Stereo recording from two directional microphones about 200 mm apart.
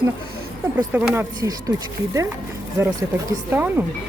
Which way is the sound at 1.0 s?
10° right (ahead or behind).